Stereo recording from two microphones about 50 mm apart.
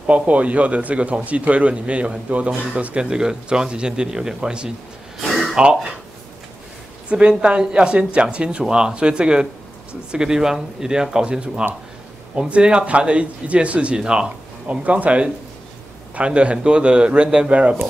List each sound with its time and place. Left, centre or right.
0.0 s a man's voice: right
5.2 s a sound: centre
5.6 s a man's voice: centre
7.1 s a man's voice: right